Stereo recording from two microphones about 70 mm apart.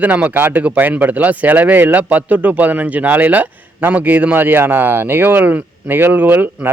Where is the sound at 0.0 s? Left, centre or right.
Right.